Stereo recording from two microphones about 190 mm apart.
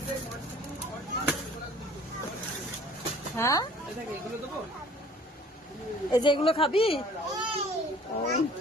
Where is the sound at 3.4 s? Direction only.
15° left (ahead or behind).